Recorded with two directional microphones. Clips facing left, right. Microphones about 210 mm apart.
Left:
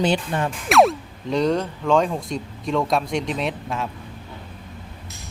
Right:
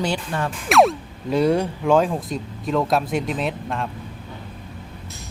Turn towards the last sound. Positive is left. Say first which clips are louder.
# right 1 dB
turn(degrees=0)  # may be behind; listen again after turning